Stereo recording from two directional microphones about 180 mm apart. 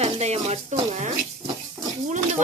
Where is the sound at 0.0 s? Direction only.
35° right (ahead or behind).